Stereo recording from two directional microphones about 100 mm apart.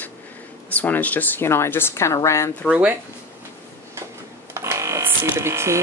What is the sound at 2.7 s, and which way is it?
Speech, 15° right (ahead or behind).